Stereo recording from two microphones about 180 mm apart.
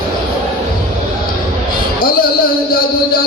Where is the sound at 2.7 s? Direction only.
55° left (ahead or behind).